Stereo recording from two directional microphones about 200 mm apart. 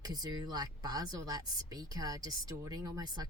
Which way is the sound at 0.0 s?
20° right (ahead or behind).